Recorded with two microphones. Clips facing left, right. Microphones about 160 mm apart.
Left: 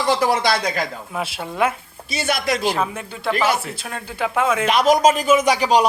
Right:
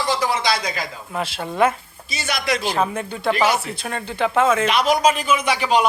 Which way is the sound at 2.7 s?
Centre (ahead or behind).